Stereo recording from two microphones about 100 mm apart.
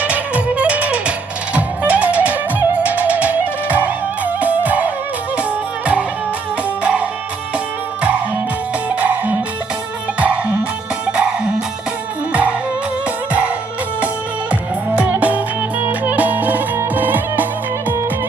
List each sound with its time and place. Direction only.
0.0 s music: 15° right (ahead or behind)
9.0 s music: 15° right (ahead or behind)
14.8 s music: 15° right (ahead or behind)